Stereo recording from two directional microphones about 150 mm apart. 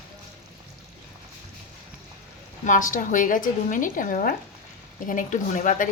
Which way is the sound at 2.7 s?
60° left (ahead or behind).